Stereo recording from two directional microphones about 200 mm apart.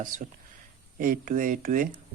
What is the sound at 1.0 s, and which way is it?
Speech, 45° right (ahead or behind).